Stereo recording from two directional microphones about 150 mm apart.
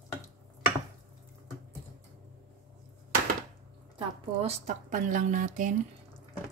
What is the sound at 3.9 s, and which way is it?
Speech, 45° right (ahead or behind).